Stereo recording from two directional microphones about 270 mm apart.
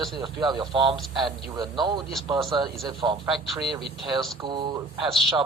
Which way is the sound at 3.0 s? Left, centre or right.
Centre.